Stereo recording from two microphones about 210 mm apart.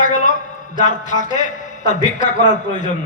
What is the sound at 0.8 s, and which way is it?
A man's voice, 35° left (ahead or behind).